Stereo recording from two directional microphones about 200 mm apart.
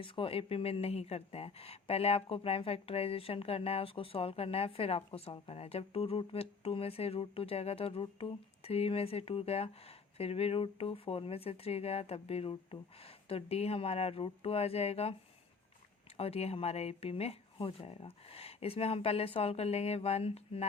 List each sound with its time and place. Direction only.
0.0 s speech: 25° left (ahead or behind)
16.1 s speech: 30° left (ahead or behind)